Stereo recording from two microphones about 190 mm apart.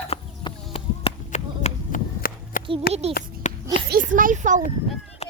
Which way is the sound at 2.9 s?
50° left (ahead or behind).